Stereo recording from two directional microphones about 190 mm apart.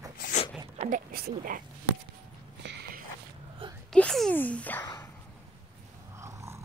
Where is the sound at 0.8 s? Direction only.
45° right (ahead or behind).